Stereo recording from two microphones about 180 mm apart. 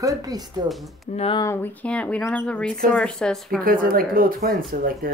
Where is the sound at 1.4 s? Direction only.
10° left (ahead or behind).